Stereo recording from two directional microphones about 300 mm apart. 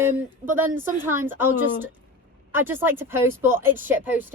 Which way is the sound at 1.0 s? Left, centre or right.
Centre.